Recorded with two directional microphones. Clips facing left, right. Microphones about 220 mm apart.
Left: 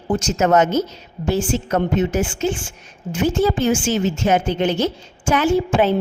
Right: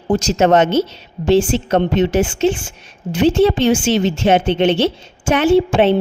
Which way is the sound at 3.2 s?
75° right (ahead or behind).